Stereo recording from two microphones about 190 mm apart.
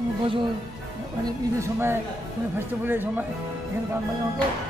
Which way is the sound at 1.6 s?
15° right (ahead or behind).